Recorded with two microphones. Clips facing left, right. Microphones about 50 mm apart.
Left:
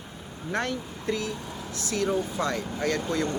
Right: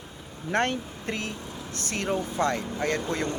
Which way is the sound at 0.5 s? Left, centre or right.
Right.